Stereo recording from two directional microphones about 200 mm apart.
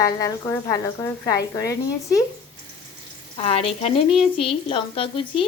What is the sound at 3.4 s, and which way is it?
A woman's voice, 30° left (ahead or behind).